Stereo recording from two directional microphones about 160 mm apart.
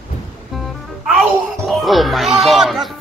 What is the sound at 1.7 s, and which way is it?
Speech, centre (ahead or behind).